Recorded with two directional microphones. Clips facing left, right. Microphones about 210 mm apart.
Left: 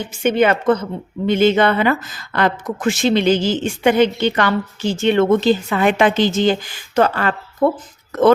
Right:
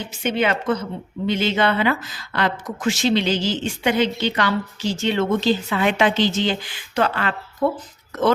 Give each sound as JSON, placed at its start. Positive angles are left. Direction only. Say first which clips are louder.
{"t": 0.1, "sound": "speech", "louder": "left 6 dB", "side_deg": 50}